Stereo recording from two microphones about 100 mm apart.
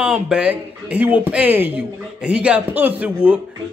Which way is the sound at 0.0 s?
5° right (ahead or behind).